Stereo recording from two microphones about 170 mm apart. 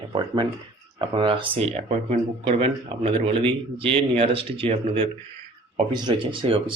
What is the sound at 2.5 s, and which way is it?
A man's voice, 30° right (ahead or behind).